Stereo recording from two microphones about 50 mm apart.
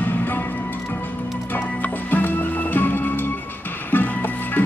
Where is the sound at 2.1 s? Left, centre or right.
Left.